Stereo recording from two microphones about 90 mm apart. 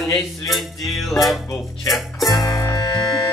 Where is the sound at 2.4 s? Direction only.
40° left (ahead or behind).